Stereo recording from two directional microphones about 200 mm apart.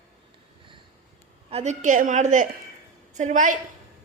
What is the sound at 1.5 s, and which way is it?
A woman's voice, 35° right (ahead or behind).